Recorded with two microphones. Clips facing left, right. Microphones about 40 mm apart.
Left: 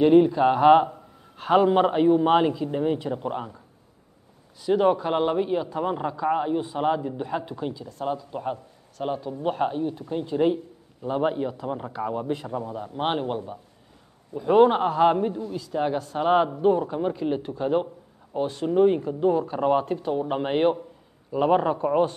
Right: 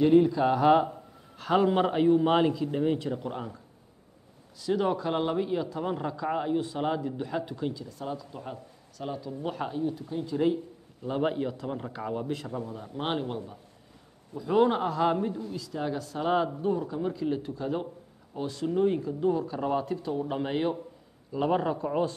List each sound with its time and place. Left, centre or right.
0.0 s a man's voice: left
4.6 s a man's voice: left
8.0 s speech: left
10.0 s speech: left
10.3 s speech: left
11.0 s a man's voice: centre
12.4 s a man's voice: left
15.1 s a man's voice: centre
15.5 s speech: left